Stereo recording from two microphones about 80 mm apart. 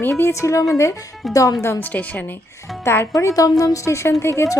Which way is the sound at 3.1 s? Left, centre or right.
Left.